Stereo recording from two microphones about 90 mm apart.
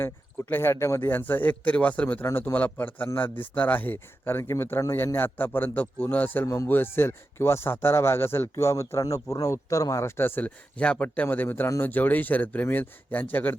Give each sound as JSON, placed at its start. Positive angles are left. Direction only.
{"t": 0.0, "sound": "speech", "side_deg": 25}